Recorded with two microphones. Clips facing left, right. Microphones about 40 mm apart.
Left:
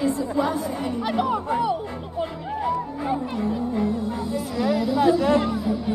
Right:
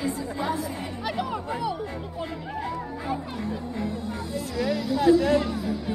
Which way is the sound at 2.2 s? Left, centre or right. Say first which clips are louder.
Left 6 dB; centre.